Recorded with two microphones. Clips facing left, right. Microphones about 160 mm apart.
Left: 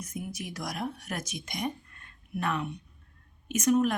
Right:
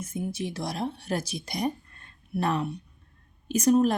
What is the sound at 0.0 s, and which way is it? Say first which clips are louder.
A woman's voice: right 6 dB; 30° right (ahead or behind).